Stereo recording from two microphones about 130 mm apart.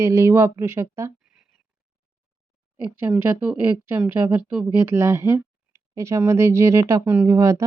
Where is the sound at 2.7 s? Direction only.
15° right (ahead or behind).